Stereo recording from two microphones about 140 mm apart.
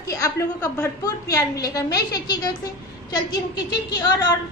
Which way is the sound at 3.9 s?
30° left (ahead or behind).